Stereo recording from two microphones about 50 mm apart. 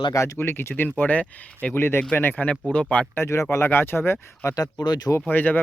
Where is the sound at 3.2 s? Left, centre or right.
Left.